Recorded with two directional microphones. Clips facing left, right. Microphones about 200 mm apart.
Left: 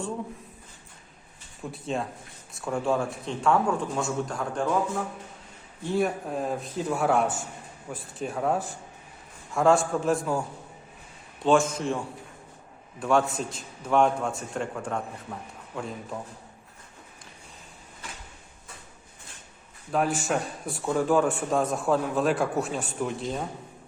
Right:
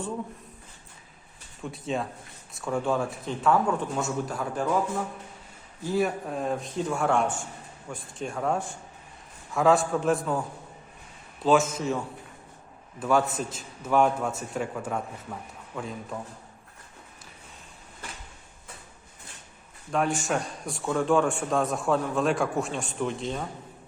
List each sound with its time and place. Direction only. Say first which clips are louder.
1.7 s a man's voice: even; centre (ahead or behind)
5.8 s a man's voice: even; centre (ahead or behind)
11.4 s a man's voice: even; centre (ahead or behind)
13.0 s a man's voice: even; 5° right (ahead or behind)
19.9 s a man's voice: left 1 dB; centre (ahead or behind)